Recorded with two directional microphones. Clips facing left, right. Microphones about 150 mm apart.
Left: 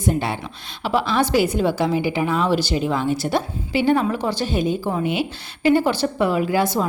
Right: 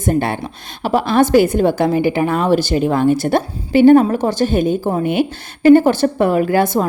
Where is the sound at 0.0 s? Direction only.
50° right (ahead or behind).